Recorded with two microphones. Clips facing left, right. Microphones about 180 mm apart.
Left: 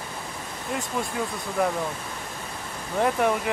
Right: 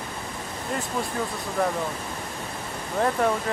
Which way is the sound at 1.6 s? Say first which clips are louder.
Left 1 dB; 10° left (ahead or behind).